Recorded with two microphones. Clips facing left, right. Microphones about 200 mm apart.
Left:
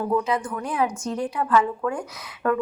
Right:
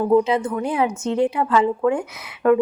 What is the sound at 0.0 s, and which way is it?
A woman's voice, 25° right (ahead or behind).